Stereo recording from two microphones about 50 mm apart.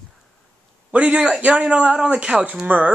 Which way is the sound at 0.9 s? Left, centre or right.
Right.